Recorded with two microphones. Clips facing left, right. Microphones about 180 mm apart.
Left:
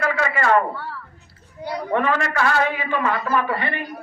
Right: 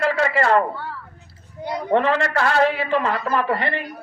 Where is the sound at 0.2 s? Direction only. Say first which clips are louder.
Even; 30° right (ahead or behind).